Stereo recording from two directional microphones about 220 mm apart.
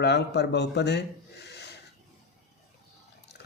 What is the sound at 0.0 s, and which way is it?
Speech, 50° left (ahead or behind).